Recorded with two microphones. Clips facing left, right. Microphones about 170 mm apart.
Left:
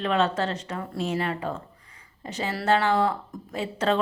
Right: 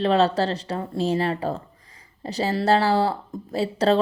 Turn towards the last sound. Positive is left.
turn(degrees=-35)  # may be behind; listen again after turning